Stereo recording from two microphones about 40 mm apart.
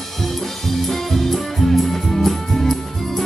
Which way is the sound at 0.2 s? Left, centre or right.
Centre.